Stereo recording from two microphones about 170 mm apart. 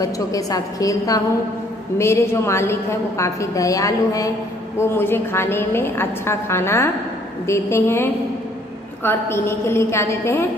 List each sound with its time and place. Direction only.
0.0 s a woman's voice: 20° left (ahead or behind)